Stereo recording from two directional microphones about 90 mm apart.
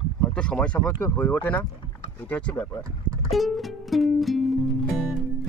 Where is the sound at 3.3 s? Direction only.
Centre (ahead or behind).